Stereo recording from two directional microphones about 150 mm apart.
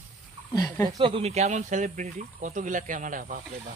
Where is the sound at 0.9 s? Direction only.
35° right (ahead or behind).